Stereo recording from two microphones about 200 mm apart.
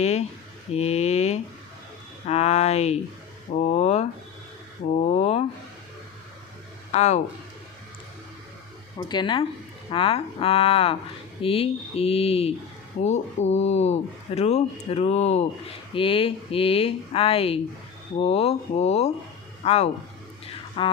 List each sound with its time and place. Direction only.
0.0 s speech: 35° left (ahead or behind)
0.7 s a sound: 30° left (ahead or behind)
2.2 s speech: 30° left (ahead or behind)
6.9 s speech: 35° left (ahead or behind)
9.0 s speech: 20° left (ahead or behind)